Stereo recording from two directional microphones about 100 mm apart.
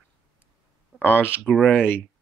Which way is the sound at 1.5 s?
10° left (ahead or behind).